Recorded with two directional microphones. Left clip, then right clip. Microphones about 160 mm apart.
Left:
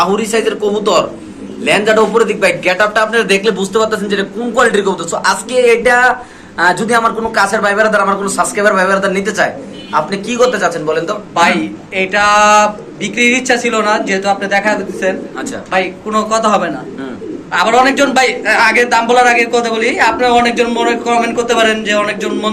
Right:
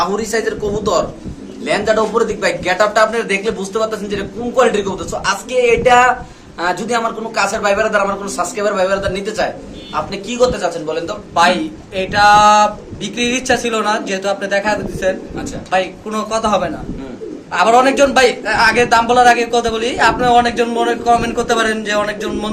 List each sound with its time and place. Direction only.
0.0 s a man's voice: 5° left (ahead or behind)
11.9 s speech: 40° right (ahead or behind)